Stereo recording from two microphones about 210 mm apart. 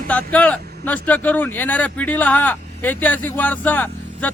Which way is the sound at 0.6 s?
50° right (ahead or behind).